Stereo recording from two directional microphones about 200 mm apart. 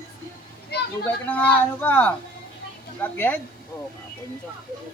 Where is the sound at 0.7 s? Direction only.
55° left (ahead or behind).